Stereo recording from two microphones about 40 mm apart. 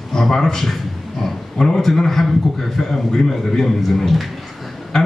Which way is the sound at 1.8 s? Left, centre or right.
Centre.